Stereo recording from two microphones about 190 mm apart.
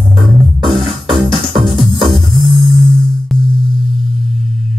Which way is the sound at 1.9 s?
30° right (ahead or behind).